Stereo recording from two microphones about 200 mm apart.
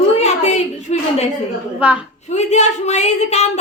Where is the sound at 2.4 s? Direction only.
35° left (ahead or behind).